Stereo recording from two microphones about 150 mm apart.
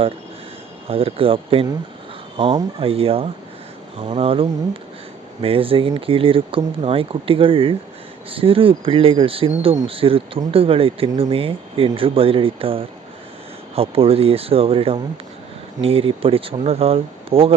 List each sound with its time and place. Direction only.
0.9 s speech: 40° right (ahead or behind)
2.8 s speech: 40° right (ahead or behind)